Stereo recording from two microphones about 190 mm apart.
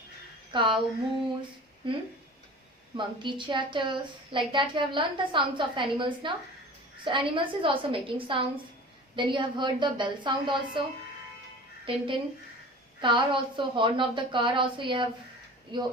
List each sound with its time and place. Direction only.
0.5 s a woman's voice: 25° right (ahead or behind)
1.8 s a woman's voice: 25° right (ahead or behind)
3.2 s a woman's voice: 25° right (ahead or behind)
11.9 s a woman's voice: 25° right (ahead or behind)